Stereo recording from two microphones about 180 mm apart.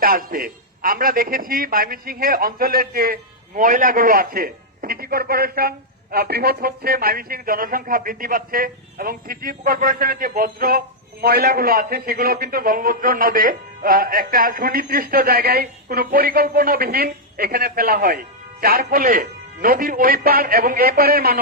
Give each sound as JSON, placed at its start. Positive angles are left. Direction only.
{"t": 0.0, "sound": "a man's voice", "side_deg": -55}